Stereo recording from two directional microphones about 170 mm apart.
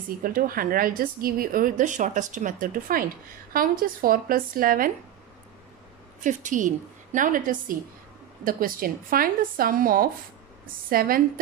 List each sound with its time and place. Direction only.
0.2 s a woman's voice: 55° right (ahead or behind)
6.2 s a woman's voice: 50° right (ahead or behind)